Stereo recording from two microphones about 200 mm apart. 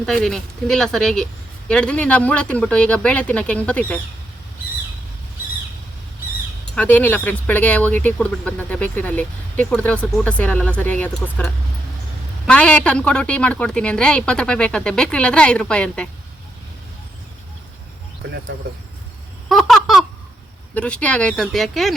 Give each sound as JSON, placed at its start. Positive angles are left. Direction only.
{"t": 0.0, "sound": "a woman's voice", "side_deg": 0}
{"t": 6.7, "sound": "a woman's voice", "side_deg": 10}
{"t": 18.2, "sound": "speech", "side_deg": -55}
{"t": 19.5, "sound": "a sound", "side_deg": 0}
{"t": 20.7, "sound": "a woman's voice", "side_deg": 5}